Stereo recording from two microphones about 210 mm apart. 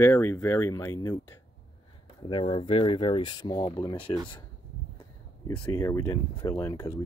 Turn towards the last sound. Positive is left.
turn(degrees=10)  # may be behind; listen again after turning